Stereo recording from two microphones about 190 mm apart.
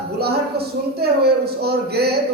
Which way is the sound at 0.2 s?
55° right (ahead or behind).